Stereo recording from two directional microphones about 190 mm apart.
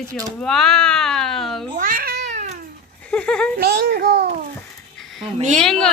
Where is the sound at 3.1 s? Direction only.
5° left (ahead or behind).